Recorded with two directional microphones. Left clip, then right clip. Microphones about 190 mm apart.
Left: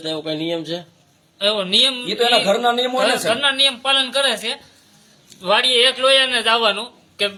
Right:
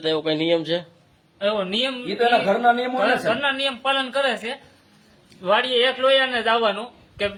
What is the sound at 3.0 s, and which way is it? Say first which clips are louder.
A man's voice: left 4 dB; centre (ahead or behind).